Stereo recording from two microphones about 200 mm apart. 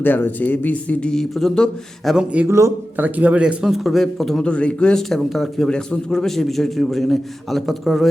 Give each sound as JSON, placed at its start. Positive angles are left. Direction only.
{"t": 0.0, "sound": "speech", "side_deg": 10}